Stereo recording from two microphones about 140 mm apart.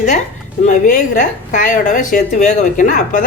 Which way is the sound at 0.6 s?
65° left (ahead or behind).